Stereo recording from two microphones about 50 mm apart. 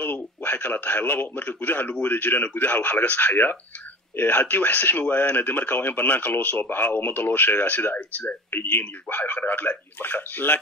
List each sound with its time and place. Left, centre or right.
0.0 s speech: left